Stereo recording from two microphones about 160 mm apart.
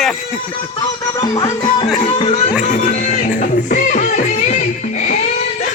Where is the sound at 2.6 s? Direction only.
50° left (ahead or behind).